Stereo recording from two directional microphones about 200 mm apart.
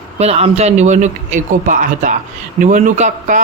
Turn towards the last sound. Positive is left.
turn(degrees=-40)  # may be behind; listen again after turning